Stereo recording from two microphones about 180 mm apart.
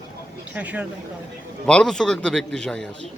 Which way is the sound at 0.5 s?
10° right (ahead or behind).